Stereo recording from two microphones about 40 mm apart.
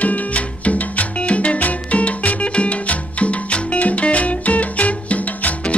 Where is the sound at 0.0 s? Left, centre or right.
Left.